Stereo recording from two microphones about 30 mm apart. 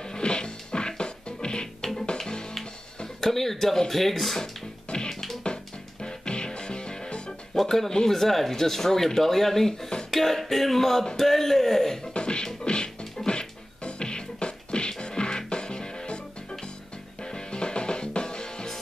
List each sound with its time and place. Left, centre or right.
0.0 s music: left
3.2 s speech: centre
4.8 s music: left
7.5 s speech: centre
12.1 s beatboxing: left
17.2 s music: left